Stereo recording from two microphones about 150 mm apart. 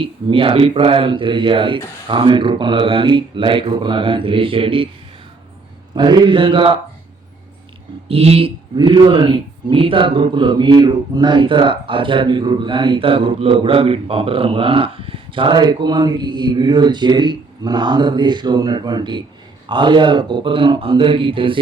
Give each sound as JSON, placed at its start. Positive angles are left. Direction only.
{"t": 0.0, "sound": "speech", "side_deg": -35}
{"t": 5.9, "sound": "speech", "side_deg": -30}
{"t": 8.0, "sound": "speech", "side_deg": -40}